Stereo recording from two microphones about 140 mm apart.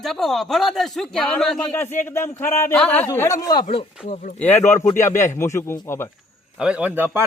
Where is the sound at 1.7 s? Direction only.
15° left (ahead or behind).